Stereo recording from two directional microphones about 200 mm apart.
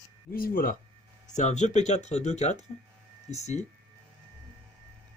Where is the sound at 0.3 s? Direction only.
45° left (ahead or behind).